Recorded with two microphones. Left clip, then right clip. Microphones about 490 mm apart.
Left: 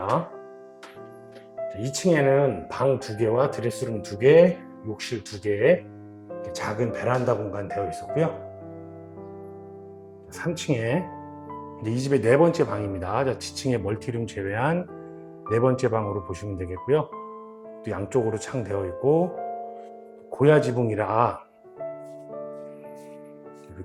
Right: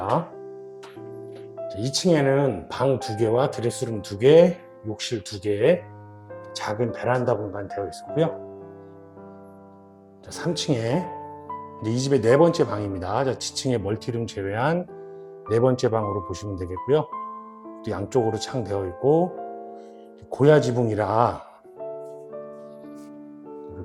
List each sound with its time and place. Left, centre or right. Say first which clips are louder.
1.7 s speech: right 1 dB; centre
10.3 s speech: right 2 dB; centre
20.3 s speech: right 2 dB; centre